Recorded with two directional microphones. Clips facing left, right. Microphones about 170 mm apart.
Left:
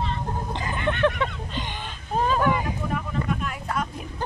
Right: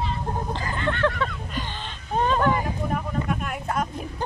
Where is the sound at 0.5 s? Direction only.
20° left (ahead or behind).